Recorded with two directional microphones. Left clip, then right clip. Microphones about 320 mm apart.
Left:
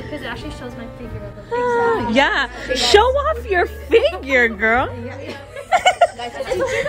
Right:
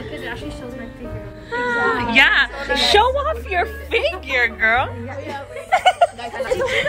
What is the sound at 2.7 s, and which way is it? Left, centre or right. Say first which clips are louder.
A woman's voice: left 2 dB; left.